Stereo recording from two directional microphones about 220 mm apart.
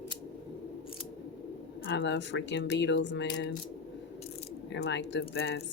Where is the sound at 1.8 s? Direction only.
55° left (ahead or behind).